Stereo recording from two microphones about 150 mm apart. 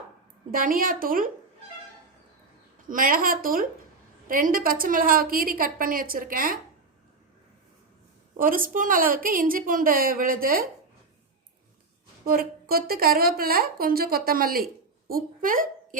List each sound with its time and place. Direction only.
0.5 s a woman's voice: 70° right (ahead or behind)
2.9 s a woman's voice: 70° right (ahead or behind)
8.4 s a woman's voice: 65° right (ahead or behind)
12.2 s a woman's voice: 75° right (ahead or behind)